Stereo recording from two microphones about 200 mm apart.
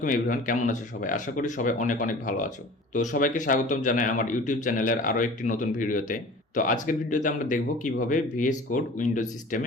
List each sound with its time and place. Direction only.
0.0 s a man's voice: 40° left (ahead or behind)